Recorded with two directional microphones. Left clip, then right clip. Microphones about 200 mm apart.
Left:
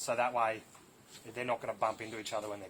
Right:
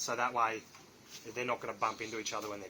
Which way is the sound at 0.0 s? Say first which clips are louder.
Left 2 dB; 40° left (ahead or behind).